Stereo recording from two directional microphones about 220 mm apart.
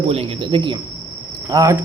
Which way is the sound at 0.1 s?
25° right (ahead or behind).